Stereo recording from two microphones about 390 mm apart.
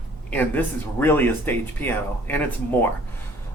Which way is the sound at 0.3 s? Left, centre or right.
Centre.